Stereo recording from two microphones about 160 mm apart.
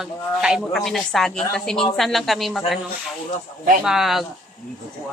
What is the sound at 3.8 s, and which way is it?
Speech, centre (ahead or behind).